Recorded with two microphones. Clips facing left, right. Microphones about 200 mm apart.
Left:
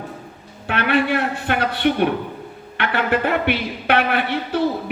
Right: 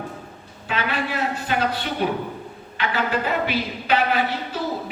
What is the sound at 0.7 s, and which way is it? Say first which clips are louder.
Speech: left 7 dB; 60° left (ahead or behind).